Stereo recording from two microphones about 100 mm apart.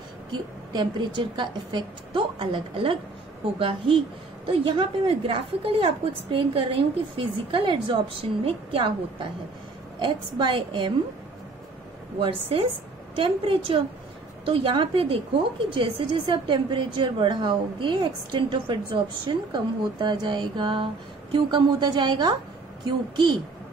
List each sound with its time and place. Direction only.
0.3 s a woman's voice: 50° right (ahead or behind)
12.2 s a woman's voice: 65° right (ahead or behind)